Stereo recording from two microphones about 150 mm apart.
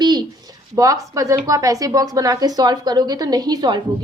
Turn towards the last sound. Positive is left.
turn(degrees=-25)  # may be behind; listen again after turning